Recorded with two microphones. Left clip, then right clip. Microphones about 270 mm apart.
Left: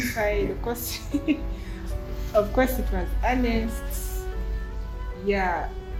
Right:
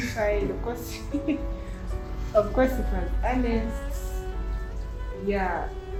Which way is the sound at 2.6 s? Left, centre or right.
Left.